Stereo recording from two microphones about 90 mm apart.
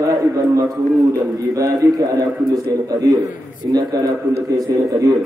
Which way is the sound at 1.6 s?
40° right (ahead or behind).